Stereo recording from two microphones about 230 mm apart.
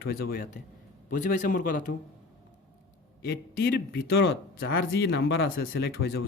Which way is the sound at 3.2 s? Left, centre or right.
Left.